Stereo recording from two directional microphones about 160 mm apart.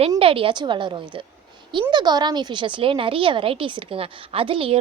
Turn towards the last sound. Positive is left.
turn(degrees=-35)  # may be behind; listen again after turning